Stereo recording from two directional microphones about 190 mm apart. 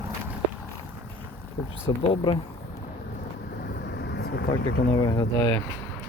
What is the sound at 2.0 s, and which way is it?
Speech, 30° left (ahead or behind).